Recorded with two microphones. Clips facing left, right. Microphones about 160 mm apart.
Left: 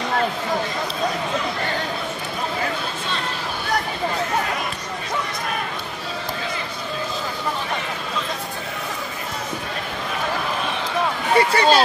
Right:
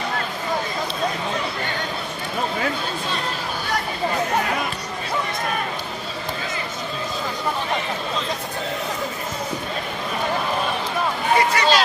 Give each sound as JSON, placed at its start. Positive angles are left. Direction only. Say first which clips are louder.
{"t": 11.3, "sound": "vehicle", "louder": "left 3 dB", "side_deg": 30}